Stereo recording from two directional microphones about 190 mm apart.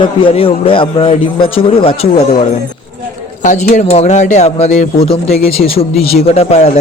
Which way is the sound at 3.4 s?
40° left (ahead or behind).